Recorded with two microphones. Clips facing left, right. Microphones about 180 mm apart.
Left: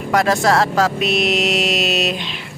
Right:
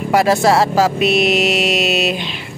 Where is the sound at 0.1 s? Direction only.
5° right (ahead or behind).